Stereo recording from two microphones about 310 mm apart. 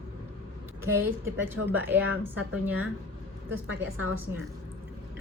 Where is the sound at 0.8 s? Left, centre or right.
Centre.